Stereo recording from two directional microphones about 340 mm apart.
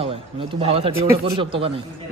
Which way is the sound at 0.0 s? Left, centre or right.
Centre.